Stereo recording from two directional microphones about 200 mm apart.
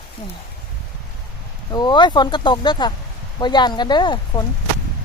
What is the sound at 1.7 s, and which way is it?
Speech, 20° left (ahead or behind).